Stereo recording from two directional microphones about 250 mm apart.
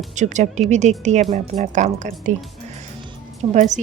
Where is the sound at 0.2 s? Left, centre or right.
Right.